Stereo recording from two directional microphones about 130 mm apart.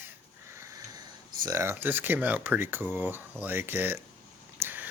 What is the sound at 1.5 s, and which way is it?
Speech, 20° right (ahead or behind).